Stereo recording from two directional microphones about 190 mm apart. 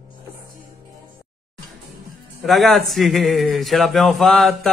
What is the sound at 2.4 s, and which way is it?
A man's voice, centre (ahead or behind).